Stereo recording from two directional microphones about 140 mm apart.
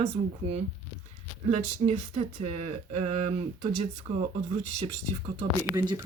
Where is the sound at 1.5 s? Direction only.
45° right (ahead or behind).